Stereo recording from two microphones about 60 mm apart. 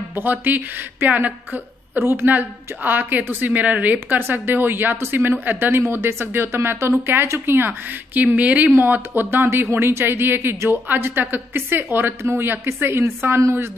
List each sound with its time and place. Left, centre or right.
0.1 s speech: right
2.0 s speech: right
8.2 s speech: right
8.7 s speech: right
12.2 s speech: right